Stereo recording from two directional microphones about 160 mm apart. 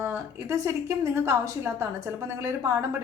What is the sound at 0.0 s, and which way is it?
A woman's voice, 15° right (ahead or behind).